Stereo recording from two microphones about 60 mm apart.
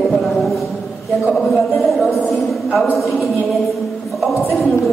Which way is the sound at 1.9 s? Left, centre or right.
Centre.